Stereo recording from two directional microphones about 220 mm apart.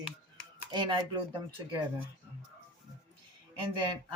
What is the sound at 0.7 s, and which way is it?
Speech, 20° right (ahead or behind).